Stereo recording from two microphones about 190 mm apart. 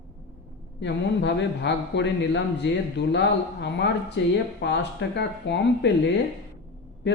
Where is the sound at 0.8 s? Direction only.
70° left (ahead or behind).